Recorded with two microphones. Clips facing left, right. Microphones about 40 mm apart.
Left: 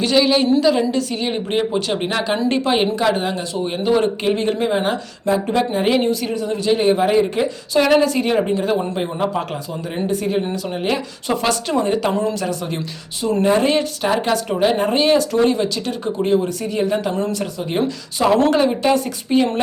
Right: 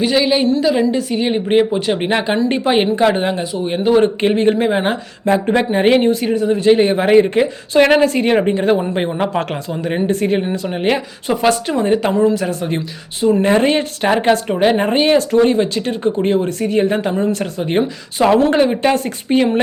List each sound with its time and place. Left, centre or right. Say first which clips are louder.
0.0 s a woman's voice: right 1 dB; centre
2.0 s speech: right 3 dB; right
3.6 s speech: right 4 dB; centre
4.0 s speech: right 5 dB; right
10.5 s speech: right 4 dB; right
11.8 s speech: right 5 dB; right